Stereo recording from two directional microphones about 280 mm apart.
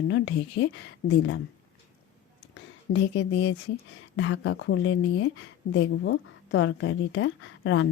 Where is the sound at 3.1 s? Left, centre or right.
Left.